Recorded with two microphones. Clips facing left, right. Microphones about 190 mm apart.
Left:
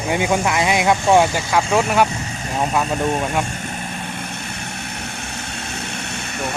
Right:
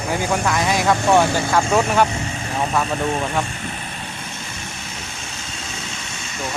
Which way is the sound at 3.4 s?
45° left (ahead or behind).